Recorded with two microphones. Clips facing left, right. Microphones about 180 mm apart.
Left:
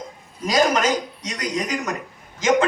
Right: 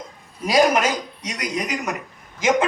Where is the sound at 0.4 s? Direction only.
10° right (ahead or behind).